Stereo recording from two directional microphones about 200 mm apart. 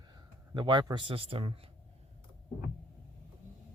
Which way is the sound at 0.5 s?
20° right (ahead or behind).